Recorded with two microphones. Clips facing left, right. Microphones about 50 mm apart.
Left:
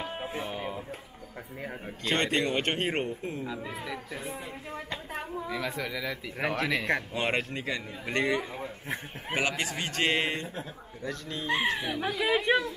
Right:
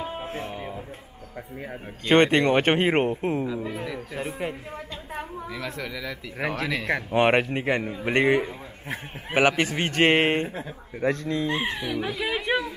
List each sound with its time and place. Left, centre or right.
0.2 s music: right
2.0 s speech: right
3.4 s speech: centre
5.5 s speech: centre
7.2 s speech: right
11.7 s speech: centre